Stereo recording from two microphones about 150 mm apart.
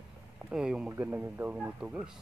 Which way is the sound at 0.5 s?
5° right (ahead or behind).